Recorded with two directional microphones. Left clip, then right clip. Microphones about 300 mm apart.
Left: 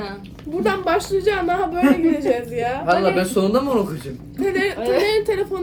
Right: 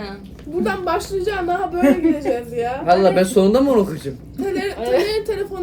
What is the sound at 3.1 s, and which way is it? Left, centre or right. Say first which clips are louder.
Speech: right 4 dB; right.